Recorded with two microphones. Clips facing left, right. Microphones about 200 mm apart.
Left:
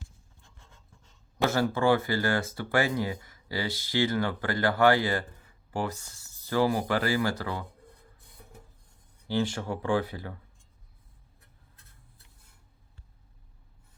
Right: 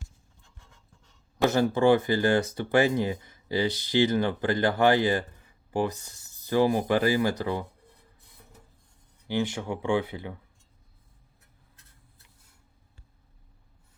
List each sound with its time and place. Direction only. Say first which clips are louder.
1.5 s speech: right 3 dB; 20° right (ahead or behind)
9.2 s speech: even; 20° right (ahead or behind)